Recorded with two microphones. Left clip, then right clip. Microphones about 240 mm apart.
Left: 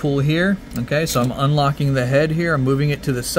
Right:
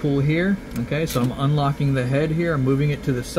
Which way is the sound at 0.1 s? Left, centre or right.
Left.